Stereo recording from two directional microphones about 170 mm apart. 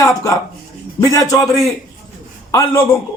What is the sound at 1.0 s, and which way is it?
Speech, 20° left (ahead or behind).